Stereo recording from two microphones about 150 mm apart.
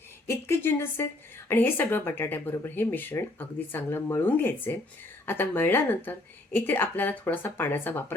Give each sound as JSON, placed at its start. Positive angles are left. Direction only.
{"t": 0.3, "sound": "speech", "side_deg": 15}